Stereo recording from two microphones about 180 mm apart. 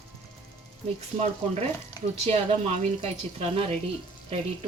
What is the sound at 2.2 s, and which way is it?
A woman's voice, 35° right (ahead or behind).